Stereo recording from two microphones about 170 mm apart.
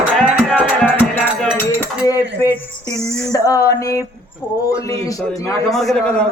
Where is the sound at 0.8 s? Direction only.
5° left (ahead or behind).